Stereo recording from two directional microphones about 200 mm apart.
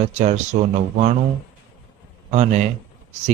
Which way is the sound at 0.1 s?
35° right (ahead or behind).